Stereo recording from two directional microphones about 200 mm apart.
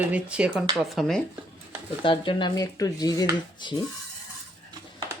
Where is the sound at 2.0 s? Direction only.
25° left (ahead or behind).